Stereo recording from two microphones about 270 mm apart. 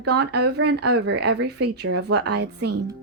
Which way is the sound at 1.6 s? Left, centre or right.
Right.